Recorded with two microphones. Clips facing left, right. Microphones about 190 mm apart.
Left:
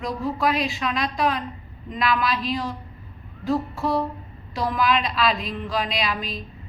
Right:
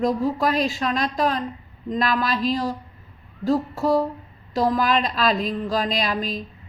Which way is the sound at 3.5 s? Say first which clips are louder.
Right 3 dB; 40° right (ahead or behind).